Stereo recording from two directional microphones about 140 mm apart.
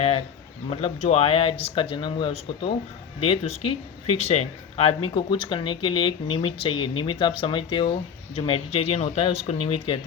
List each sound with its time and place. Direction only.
0.0 s bird: 45° left (ahead or behind)
0.7 s speech: 45° left (ahead or behind)
4.8 s speech: 40° left (ahead or behind)